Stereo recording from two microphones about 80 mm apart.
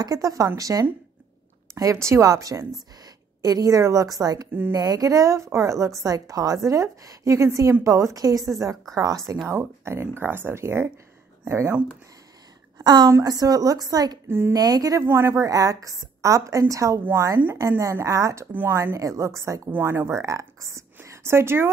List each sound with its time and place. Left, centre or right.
0.0 s a woman's voice: right
9.5 s speech: right
12.7 s a woman's voice: right
14.2 s a woman's voice: right
14.5 s a woman's voice: right
15.0 s a woman's voice: right
18.5 s speech: right
18.9 s speech: right